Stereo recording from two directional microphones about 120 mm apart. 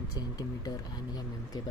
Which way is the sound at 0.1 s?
30° left (ahead or behind).